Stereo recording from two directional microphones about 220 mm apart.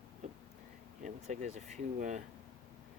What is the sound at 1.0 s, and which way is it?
Speech, 35° right (ahead or behind).